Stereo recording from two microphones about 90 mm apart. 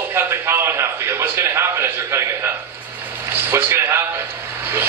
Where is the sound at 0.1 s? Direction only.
25° right (ahead or behind).